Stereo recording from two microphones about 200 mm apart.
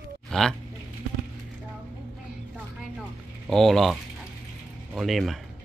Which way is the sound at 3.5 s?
Centre (ahead or behind).